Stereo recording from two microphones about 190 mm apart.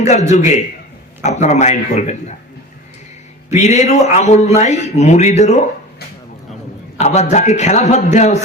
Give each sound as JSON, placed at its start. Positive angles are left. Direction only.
{"t": 0.0, "sound": "speech", "side_deg": 35}
{"t": 3.6, "sound": "speech", "side_deg": 35}
{"t": 7.0, "sound": "speech", "side_deg": 35}